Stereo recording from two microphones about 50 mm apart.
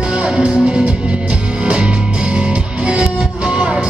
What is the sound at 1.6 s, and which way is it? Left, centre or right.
Music, right.